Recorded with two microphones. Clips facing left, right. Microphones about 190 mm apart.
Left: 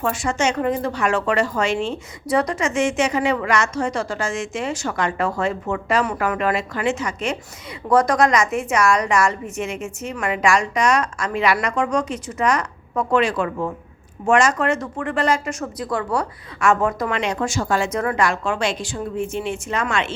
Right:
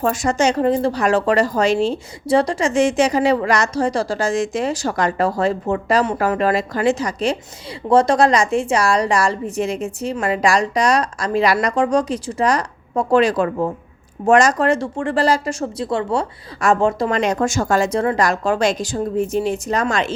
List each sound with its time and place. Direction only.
0.0 s a woman's voice: 40° right (ahead or behind)
17.2 s a woman's voice: 40° right (ahead or behind)